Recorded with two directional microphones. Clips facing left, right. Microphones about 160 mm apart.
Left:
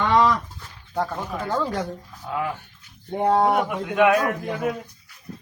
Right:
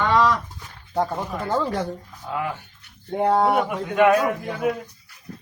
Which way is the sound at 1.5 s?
Centre (ahead or behind).